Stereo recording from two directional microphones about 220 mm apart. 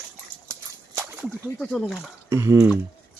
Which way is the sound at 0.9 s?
10° right (ahead or behind).